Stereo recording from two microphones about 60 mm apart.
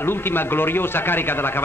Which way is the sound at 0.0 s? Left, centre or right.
Left.